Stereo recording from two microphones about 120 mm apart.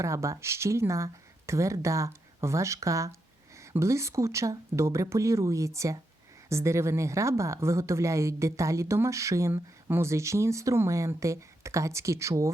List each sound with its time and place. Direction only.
0.0 s a woman's voice: 25° right (ahead or behind)